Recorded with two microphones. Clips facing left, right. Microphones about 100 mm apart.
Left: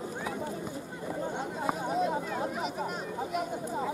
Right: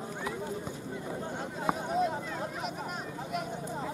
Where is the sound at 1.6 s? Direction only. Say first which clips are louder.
Right 1 dB; centre (ahead or behind).